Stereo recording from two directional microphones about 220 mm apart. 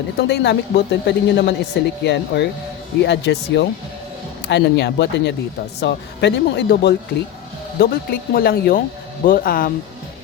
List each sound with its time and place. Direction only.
0.2 s a woman's voice: 50° left (ahead or behind)